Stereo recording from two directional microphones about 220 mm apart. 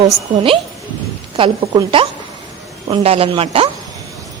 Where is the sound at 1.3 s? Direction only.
25° right (ahead or behind).